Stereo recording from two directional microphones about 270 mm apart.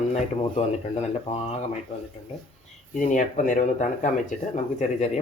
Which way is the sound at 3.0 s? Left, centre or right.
Left.